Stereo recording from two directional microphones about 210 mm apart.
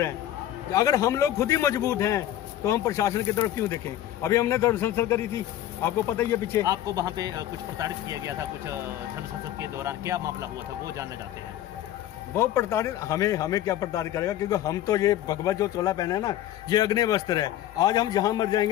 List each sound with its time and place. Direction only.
0.7 s a man's voice: 15° left (ahead or behind)
6.7 s speech: 15° right (ahead or behind)
9.6 s speech: 15° right (ahead or behind)
12.4 s a man's voice: 10° left (ahead or behind)